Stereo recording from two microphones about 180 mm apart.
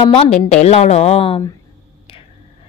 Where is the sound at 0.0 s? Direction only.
35° left (ahead or behind).